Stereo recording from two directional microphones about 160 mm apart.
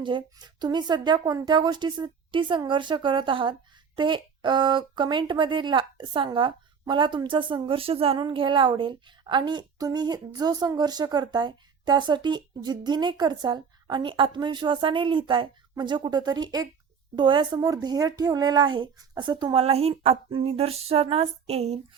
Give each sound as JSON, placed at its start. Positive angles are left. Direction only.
{"t": 0.0, "sound": "speech", "side_deg": -30}